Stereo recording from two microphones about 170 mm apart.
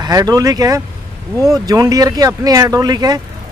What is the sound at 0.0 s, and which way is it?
Speech, 20° right (ahead or behind).